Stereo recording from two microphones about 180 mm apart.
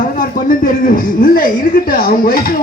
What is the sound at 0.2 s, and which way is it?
Speech, 50° left (ahead or behind).